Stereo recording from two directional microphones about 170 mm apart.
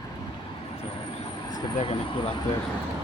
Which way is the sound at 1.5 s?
30° left (ahead or behind).